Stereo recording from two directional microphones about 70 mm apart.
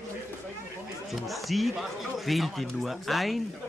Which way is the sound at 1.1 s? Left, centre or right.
Centre.